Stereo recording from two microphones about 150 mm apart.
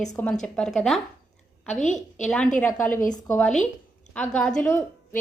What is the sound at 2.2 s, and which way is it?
A woman's voice, 5° left (ahead or behind).